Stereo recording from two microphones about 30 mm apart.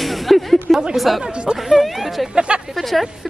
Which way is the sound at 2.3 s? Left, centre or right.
Right.